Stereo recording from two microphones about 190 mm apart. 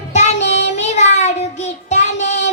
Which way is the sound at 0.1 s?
35° left (ahead or behind).